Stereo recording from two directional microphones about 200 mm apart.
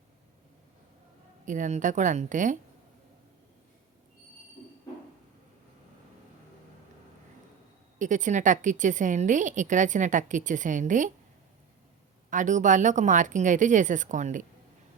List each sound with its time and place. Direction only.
1.5 s a woman's voice: 40° right (ahead or behind)
7.9 s a woman's voice: 40° right (ahead or behind)
12.3 s a woman's voice: 40° right (ahead or behind)